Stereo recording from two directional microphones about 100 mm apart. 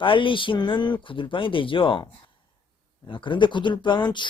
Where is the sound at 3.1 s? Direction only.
55° left (ahead or behind).